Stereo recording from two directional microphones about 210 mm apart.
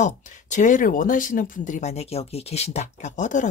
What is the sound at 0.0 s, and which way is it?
Speech, 35° left (ahead or behind).